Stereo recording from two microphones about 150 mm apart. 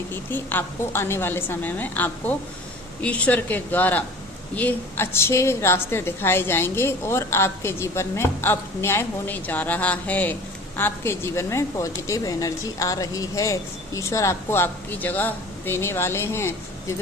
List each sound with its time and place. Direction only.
0.1 s a woman's voice: 15° left (ahead or behind)